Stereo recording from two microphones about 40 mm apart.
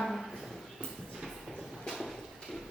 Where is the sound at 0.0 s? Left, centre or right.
Centre.